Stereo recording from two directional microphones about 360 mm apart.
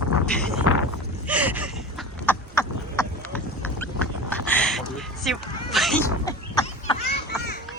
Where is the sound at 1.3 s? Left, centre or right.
Centre.